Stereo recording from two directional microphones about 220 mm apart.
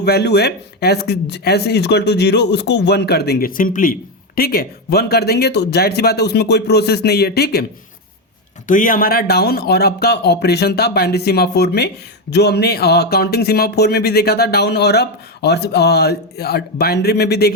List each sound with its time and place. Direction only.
0.0 s speech: 50° left (ahead or behind)
8.6 s speech: 35° left (ahead or behind)